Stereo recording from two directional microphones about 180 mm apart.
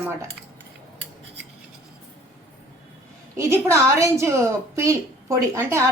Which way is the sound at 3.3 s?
15° right (ahead or behind).